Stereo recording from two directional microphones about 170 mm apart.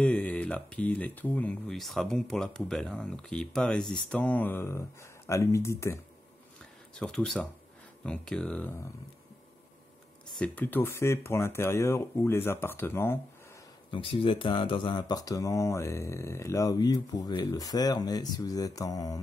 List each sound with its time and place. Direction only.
0.0 s speech: 10° left (ahead or behind)
7.0 s speech: 5° left (ahead or behind)
10.4 s speech: 10° left (ahead or behind)
13.8 s speech: 30° left (ahead or behind)